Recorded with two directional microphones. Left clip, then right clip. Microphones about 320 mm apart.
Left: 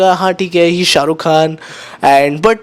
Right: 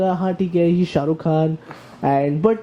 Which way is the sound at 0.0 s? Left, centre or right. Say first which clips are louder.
Left 10 dB; centre.